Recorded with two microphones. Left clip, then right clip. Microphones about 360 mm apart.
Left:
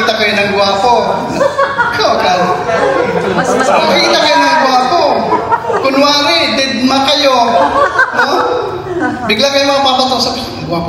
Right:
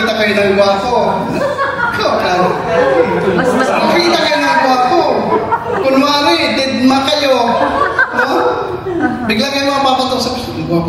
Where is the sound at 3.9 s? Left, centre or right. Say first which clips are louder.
Left 3 dB; centre.